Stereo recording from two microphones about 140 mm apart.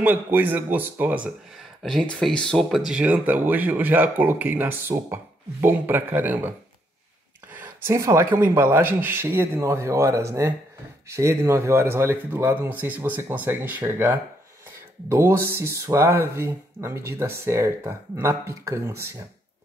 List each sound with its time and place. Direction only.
0.0 s speech: 15° right (ahead or behind)
1.8 s speech: 5° left (ahead or behind); by 6.5 s 15° right (ahead or behind)
7.5 s speech: 15° right (ahead or behind)